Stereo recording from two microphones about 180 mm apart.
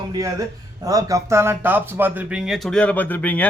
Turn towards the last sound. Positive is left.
turn(degrees=10)  # may be behind; listen again after turning